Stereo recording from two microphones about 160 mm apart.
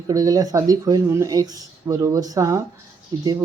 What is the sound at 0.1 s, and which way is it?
Speech, 20° right (ahead or behind).